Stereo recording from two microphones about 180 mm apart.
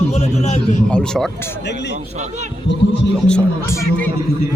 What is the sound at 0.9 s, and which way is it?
Speech, 5° left (ahead or behind).